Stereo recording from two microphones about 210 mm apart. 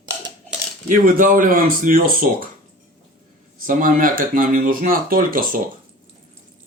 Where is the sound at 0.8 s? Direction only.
40° right (ahead or behind).